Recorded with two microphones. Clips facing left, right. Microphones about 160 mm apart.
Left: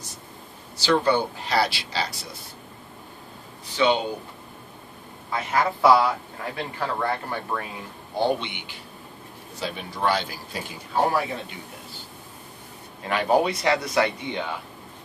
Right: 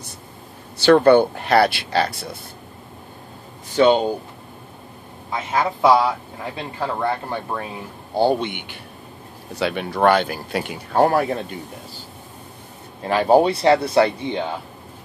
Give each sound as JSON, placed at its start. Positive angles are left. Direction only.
{"t": 0.7, "sound": "speech", "side_deg": -60}
{"t": 3.7, "sound": "speech", "side_deg": -45}
{"t": 5.3, "sound": "speech", "side_deg": -20}
{"t": 8.5, "sound": "speech", "side_deg": -55}
{"t": 9.6, "sound": "speech", "side_deg": -70}
{"t": 13.0, "sound": "speech", "side_deg": -35}